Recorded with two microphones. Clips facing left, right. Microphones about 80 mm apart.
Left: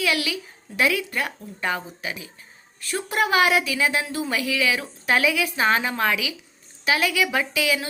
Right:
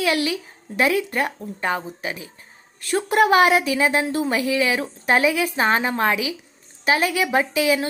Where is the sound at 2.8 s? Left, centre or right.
Right.